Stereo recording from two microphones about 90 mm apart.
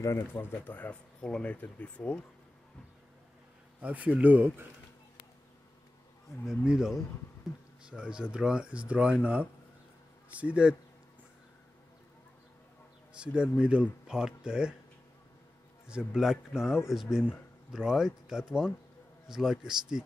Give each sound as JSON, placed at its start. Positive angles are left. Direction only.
{"t": 0.0, "sound": "speech", "side_deg": 30}
{"t": 3.8, "sound": "speech", "side_deg": -15}
{"t": 6.6, "sound": "speech", "side_deg": -10}
{"t": 13.4, "sound": "speech", "side_deg": -10}
{"t": 15.9, "sound": "speech", "side_deg": -10}